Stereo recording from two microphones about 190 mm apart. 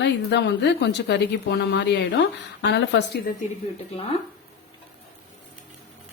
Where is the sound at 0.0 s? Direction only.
65° left (ahead or behind).